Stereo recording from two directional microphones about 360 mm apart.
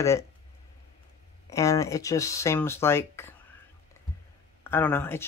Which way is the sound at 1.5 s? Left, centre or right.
Centre.